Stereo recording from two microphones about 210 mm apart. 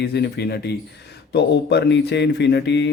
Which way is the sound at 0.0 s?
50° left (ahead or behind).